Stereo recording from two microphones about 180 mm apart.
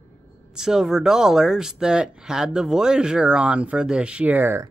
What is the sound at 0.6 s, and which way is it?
Speech, 5° right (ahead or behind).